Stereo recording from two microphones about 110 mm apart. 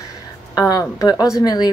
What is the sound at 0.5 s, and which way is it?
A woman's voice, 35° left (ahead or behind).